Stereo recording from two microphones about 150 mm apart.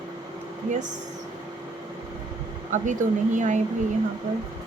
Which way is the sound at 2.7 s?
55° right (ahead or behind).